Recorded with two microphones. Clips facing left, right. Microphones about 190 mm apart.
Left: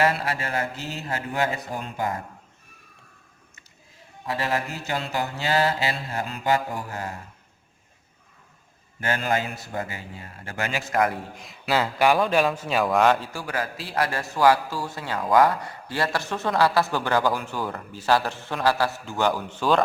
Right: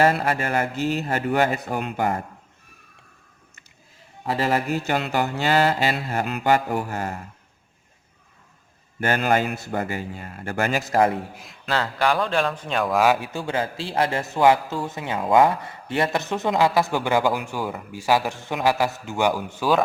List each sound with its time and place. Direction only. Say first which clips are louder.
0.0 s mantra: right 4 dB; 50° right (ahead or behind); by 2.1 s 65° right (ahead or behind)
4.4 s mantra: right 6 dB; 60° right (ahead or behind)
9.0 s mantra: right 4 dB; 60° right (ahead or behind)
9.8 s speech: right 7 dB; 50° right (ahead or behind); by 11.2 s 30° right (ahead or behind)
11.3 s a man's voice: left 1 dB; centre (ahead or behind)
13.4 s a man's voice: right 4 dB; 25° right (ahead or behind); by 19.8 s 10° right (ahead or behind)